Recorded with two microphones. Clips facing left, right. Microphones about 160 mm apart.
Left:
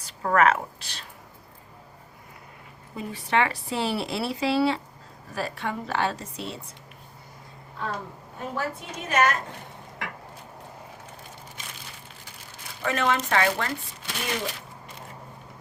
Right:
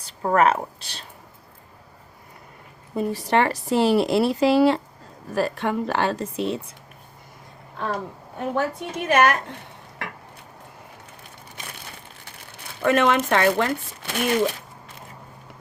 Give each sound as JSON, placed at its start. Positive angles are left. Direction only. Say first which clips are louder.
{"t": 0.0, "sound": "speech", "louder": "right 2 dB", "side_deg": -30}
{"t": 2.9, "sound": "speech", "louder": "right 5 dB", "side_deg": -40}
{"t": 8.4, "sound": "speech", "louder": "right 6 dB", "side_deg": -60}
{"t": 12.8, "sound": "speech", "louder": "right 6 dB", "side_deg": -60}